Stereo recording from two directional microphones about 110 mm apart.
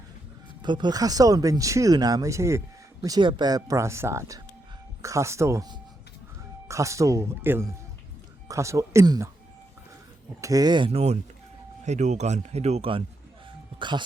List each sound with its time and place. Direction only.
0.6 s speech: 45° right (ahead or behind); by 2.6 s 25° right (ahead or behind)
3.2 s speech: 45° right (ahead or behind); by 5.6 s 25° right (ahead or behind)
6.7 s speech: 30° right (ahead or behind)
10.4 s speech: 35° right (ahead or behind)
10.9 s speech: 75° right (ahead or behind)
11.9 s speech: 90° right; by 12.9 s 75° right (ahead or behind)
13.7 s speech: 45° right (ahead or behind)